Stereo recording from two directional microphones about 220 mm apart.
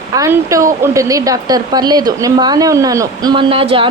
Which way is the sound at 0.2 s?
15° right (ahead or behind).